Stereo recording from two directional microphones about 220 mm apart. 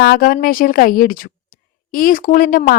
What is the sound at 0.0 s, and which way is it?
A woman's voice, 45° left (ahead or behind).